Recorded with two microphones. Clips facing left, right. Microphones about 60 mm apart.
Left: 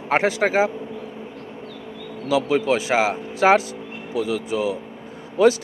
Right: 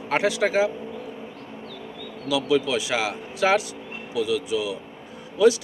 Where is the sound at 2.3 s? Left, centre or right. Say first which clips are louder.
Left 3 dB; left.